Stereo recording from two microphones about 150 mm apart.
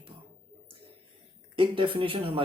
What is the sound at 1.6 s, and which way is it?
Speech, 35° right (ahead or behind).